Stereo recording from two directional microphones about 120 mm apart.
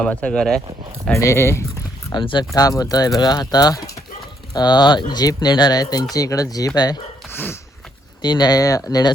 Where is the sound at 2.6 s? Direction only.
30° left (ahead or behind).